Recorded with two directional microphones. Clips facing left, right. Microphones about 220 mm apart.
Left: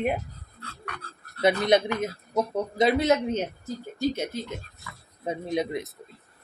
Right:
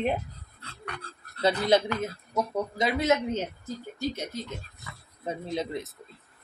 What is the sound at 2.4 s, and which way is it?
Speech, 30° left (ahead or behind).